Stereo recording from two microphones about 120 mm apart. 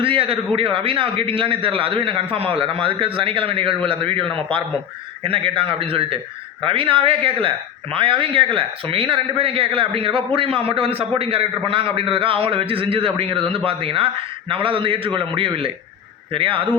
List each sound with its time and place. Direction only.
0.0 s a man's voice: 50° right (ahead or behind)